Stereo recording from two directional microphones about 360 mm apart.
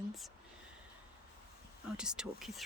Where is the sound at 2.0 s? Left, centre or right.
Centre.